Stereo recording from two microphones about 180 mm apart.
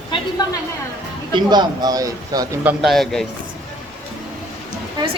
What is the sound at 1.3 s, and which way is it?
A man's voice, 25° right (ahead or behind).